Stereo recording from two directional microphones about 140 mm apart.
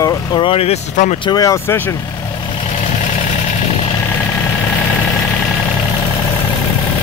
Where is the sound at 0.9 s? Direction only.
60° left (ahead or behind).